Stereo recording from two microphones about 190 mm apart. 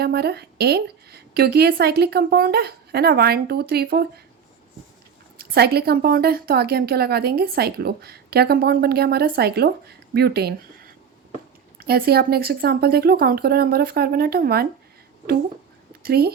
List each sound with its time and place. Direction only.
0.0 s a woman's voice: 55° right (ahead or behind)
5.4 s a woman's voice: 55° right (ahead or behind)
11.8 s speech: 55° right (ahead or behind)
16.0 s a woman's voice: 55° right (ahead or behind)